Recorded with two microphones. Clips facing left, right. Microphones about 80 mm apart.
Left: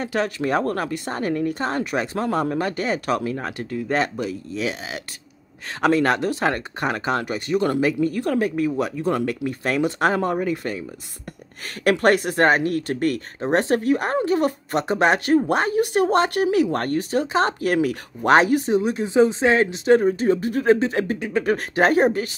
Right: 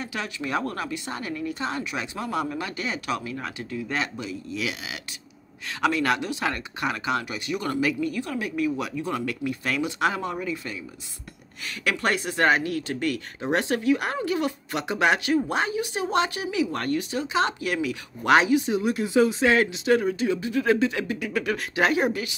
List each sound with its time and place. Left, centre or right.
0.0 s a woman's voice: left
18.8 s speech: left
20.6 s speech: left
21.5 s speech: left